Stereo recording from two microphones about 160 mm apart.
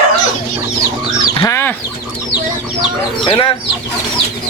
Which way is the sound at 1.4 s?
15° left (ahead or behind).